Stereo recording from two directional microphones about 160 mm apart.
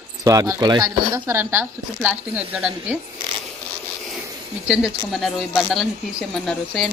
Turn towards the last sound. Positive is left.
turn(degrees=0)  # may be behind; listen again after turning